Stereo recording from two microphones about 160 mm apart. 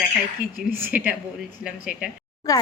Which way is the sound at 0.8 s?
10° right (ahead or behind).